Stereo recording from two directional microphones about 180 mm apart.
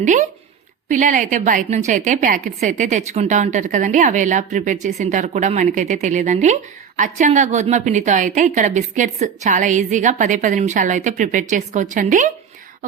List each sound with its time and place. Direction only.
0.0 s a woman's voice: 40° right (ahead or behind)